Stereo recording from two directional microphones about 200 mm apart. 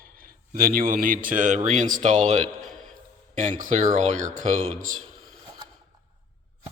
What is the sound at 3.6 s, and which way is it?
Speech, 40° right (ahead or behind).